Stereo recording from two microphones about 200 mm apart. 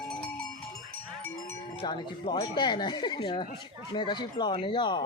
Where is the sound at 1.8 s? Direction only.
25° left (ahead or behind).